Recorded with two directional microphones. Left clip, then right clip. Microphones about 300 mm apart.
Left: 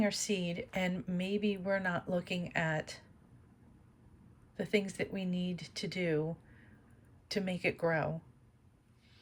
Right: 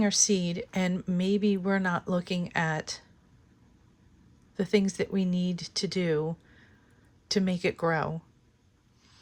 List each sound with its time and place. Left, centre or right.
0.0 s speech: centre
4.5 s speech: centre
7.3 s speech: centre